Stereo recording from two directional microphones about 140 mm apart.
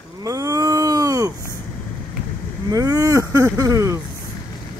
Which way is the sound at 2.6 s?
25° right (ahead or behind).